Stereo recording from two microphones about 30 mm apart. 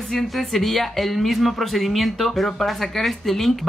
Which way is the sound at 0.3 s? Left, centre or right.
Centre.